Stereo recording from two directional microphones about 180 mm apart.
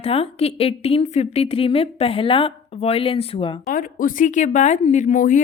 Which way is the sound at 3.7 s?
50° left (ahead or behind).